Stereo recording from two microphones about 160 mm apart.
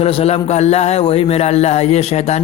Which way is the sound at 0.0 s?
35° left (ahead or behind).